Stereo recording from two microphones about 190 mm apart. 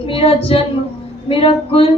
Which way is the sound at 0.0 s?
30° left (ahead or behind).